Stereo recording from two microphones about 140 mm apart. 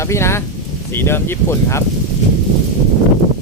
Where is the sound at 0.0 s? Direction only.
20° left (ahead or behind).